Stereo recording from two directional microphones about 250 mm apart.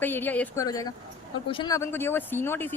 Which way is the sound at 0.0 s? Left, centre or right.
Centre.